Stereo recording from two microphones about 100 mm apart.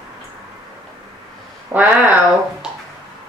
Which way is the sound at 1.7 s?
15° right (ahead or behind).